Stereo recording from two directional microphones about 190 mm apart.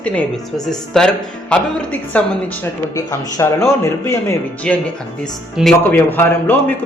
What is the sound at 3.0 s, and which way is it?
Speech, 20° left (ahead or behind).